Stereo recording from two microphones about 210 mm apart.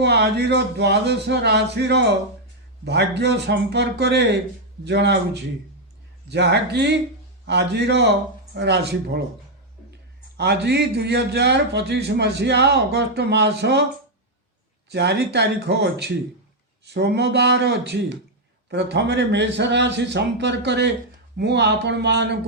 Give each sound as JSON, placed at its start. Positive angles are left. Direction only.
{"t": 0.0, "sound": "a man's voice", "side_deg": -55}
{"t": 10.3, "sound": "a man's voice", "side_deg": -50}
{"t": 14.8, "sound": "a man's voice", "side_deg": -55}